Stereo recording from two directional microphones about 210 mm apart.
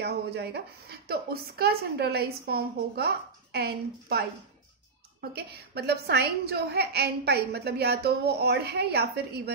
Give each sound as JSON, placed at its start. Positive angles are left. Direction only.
{"t": 0.0, "sound": "a woman's voice", "side_deg": -50}
{"t": 5.3, "sound": "a woman's voice", "side_deg": -50}